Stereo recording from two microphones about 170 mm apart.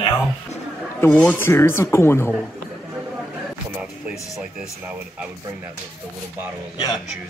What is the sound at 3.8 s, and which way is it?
Music, 5° right (ahead or behind).